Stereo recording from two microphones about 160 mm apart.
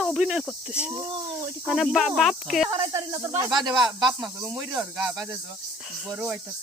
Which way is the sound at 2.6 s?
35° right (ahead or behind).